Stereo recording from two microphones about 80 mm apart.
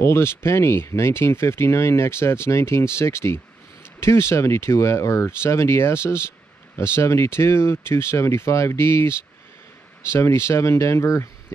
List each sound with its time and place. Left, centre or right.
0.0 s speech: left